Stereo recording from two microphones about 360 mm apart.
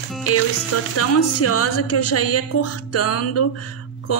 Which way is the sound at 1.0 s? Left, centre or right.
Left.